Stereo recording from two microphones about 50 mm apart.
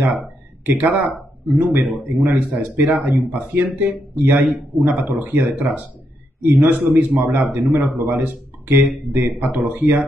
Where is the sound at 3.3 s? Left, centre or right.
Right.